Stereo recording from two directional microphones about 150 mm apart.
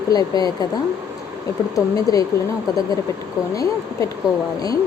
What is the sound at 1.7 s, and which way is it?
Speech, 25° left (ahead or behind).